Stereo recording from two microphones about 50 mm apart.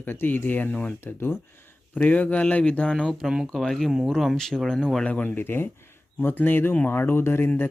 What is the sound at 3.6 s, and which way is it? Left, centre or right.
Speech, centre.